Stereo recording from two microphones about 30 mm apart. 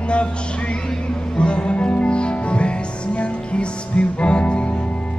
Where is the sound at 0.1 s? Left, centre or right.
Left.